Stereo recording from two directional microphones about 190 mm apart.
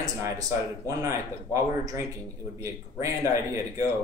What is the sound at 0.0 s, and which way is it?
Speech, 15° right (ahead or behind).